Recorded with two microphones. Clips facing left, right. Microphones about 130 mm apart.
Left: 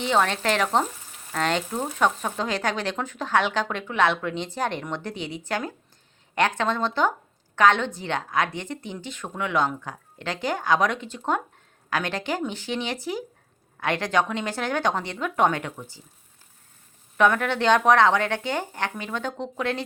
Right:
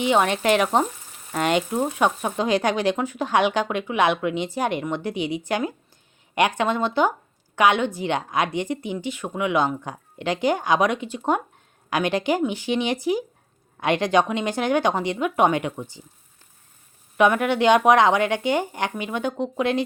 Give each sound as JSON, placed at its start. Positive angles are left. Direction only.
{"t": 0.0, "sound": "speech", "side_deg": -15}
{"t": 17.2, "sound": "speech", "side_deg": -15}